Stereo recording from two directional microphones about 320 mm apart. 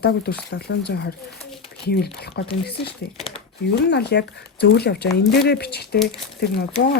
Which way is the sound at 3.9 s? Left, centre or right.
Left.